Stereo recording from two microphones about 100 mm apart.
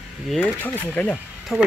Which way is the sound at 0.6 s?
15° left (ahead or behind).